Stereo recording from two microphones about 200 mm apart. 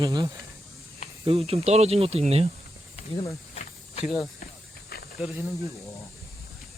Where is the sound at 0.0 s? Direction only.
20° right (ahead or behind).